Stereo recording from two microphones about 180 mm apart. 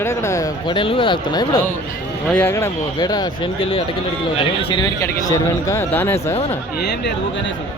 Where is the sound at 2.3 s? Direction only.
10° left (ahead or behind); by 4.9 s 30° left (ahead or behind).